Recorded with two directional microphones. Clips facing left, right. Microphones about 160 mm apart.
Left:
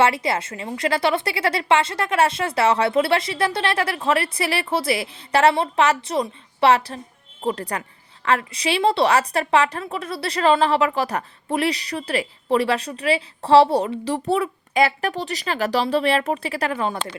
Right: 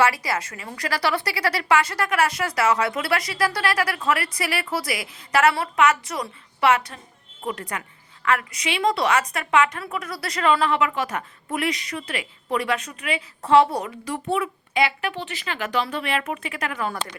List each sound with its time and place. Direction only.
0.0 s a woman's voice: 25° left (ahead or behind)